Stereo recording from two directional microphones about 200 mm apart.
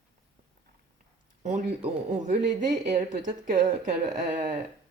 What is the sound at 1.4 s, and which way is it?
Speech, 35° right (ahead or behind).